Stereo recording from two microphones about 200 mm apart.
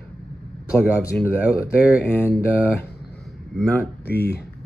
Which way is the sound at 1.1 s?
5° left (ahead or behind).